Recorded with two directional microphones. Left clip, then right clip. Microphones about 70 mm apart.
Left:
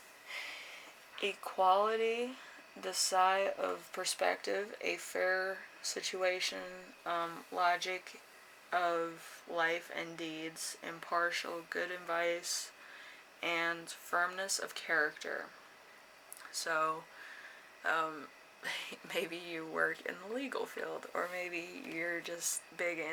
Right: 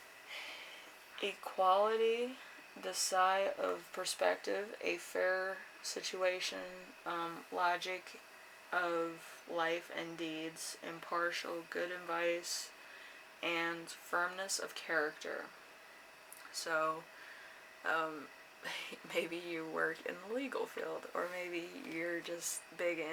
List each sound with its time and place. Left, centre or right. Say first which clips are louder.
0.3 s a sound: left 4 dB; left
1.2 s speech: left 2 dB; left
16.5 s speech: left 2 dB; left